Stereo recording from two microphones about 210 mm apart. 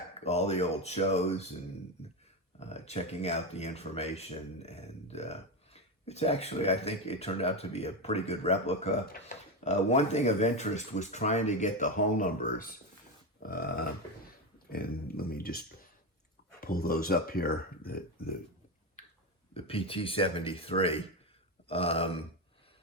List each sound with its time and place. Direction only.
0.3 s speech: 30° left (ahead or behind)
2.6 s speech: 30° left (ahead or behind); by 18.3 s 45° left (ahead or behind)
19.0 s a sound: 35° left (ahead or behind)
19.5 s speech: 25° left (ahead or behind)